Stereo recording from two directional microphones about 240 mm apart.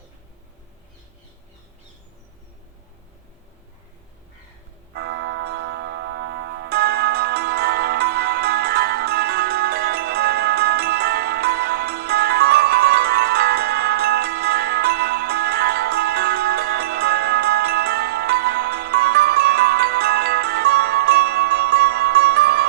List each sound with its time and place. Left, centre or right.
4.9 s tick-tock: right